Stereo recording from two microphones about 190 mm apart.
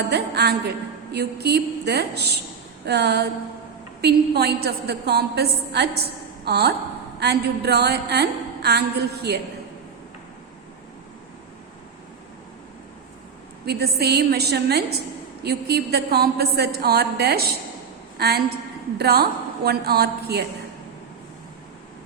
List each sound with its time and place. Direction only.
0.1 s a woman's voice: 60° right (ahead or behind)
13.7 s a woman's voice: 60° right (ahead or behind)